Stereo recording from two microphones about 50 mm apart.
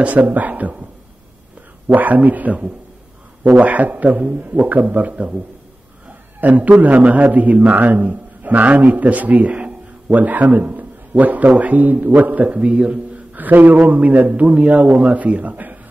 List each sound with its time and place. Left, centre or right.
0.0 s a man's voice: right
1.9 s a man's voice: right
6.4 s a man's voice: right
12.5 s speech: right
13.4 s a man's voice: right